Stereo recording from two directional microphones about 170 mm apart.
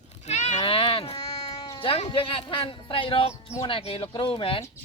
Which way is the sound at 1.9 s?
30° left (ahead or behind).